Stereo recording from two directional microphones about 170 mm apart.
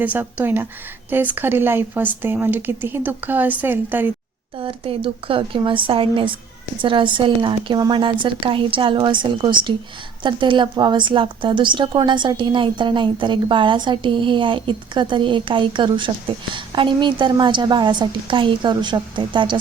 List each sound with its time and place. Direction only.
0.0 s speech: 10° right (ahead or behind)
4.6 s a woman's voice: 30° right (ahead or behind)